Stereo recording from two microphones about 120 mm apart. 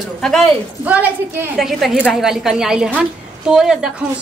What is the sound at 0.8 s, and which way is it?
Speech, 15° right (ahead or behind).